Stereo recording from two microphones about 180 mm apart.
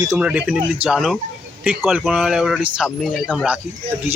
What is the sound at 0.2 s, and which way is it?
Speech, 10° right (ahead or behind).